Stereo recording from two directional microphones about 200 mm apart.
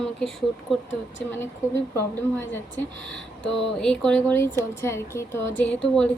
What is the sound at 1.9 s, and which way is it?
A woman's voice, 10° left (ahead or behind).